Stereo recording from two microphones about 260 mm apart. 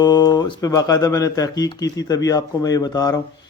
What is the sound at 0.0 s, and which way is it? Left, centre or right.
A man's voice, centre.